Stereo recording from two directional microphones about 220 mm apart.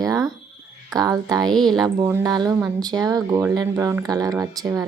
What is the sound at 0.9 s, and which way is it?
Speech, 15° right (ahead or behind).